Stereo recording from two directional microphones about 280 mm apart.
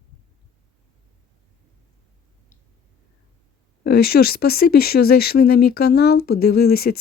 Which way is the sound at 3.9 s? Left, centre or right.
Left.